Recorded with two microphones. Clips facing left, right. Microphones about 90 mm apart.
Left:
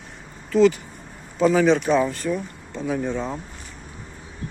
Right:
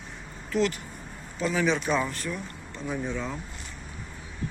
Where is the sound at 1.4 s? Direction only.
90° left.